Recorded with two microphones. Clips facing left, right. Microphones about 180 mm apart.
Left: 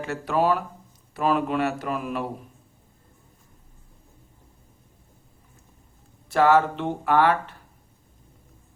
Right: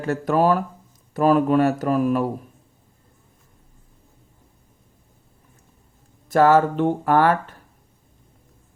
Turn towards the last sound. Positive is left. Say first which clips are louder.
# right 3 dB
turn(degrees=-45)  # may be behind; listen again after turning